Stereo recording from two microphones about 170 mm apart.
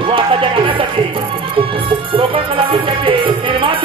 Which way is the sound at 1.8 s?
30° right (ahead or behind).